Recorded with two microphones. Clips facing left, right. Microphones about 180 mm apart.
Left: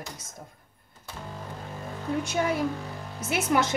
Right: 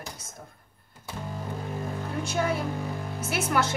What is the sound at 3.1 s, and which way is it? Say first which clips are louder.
Speech: left 2 dB; 20° left (ahead or behind).